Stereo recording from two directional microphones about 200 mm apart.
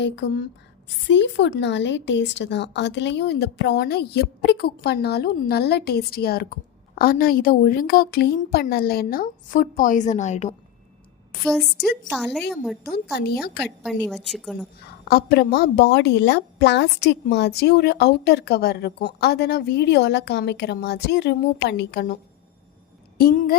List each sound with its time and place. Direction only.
0.0 s a woman's voice: 65° left (ahead or behind); by 10.5 s 35° left (ahead or behind)
11.4 s a woman's voice: centre (ahead or behind)
13.1 s a woman's voice: 55° left (ahead or behind)
13.6 s a woman's voice: 5° left (ahead or behind)
15.0 s a woman's voice: 50° left (ahead or behind)
23.1 s a woman's voice: 45° left (ahead or behind)